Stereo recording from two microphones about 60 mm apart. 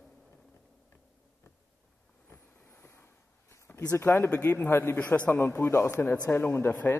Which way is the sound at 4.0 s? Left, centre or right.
Left.